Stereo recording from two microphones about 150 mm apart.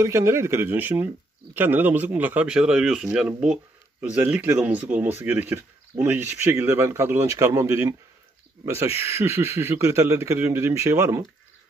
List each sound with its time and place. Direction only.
0.0 s speech: 20° right (ahead or behind)
9.0 s speech: 20° right (ahead or behind)